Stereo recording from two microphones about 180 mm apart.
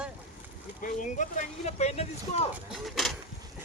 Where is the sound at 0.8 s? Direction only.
45° left (ahead or behind).